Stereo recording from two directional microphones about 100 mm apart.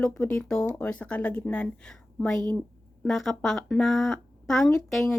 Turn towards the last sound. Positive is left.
turn(degrees=0)  # may be behind; listen again after turning